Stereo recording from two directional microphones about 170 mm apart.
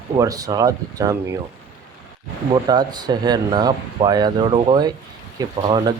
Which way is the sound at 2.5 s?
25° right (ahead or behind).